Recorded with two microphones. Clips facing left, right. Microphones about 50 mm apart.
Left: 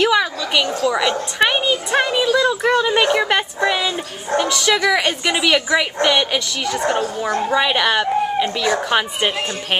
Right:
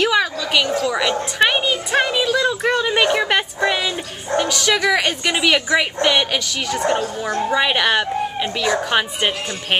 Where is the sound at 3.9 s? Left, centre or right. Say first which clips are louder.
Left 1 dB; centre.